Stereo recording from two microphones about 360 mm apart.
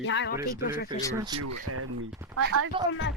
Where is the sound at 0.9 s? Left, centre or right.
Centre.